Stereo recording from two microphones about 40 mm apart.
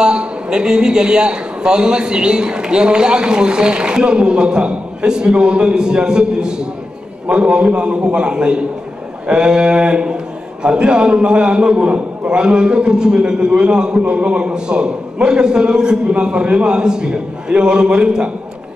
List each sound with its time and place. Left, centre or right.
0.0 s a man's voice: right